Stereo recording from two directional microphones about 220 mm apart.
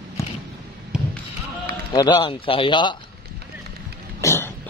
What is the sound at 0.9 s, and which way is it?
Thump, 5° right (ahead or behind).